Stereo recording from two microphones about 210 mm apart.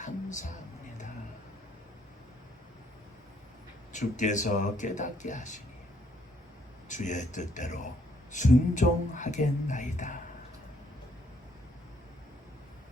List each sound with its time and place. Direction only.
0.0 s music: 35° left (ahead or behind)
3.9 s speech: 35° left (ahead or behind)
6.8 s speech: 35° left (ahead or behind)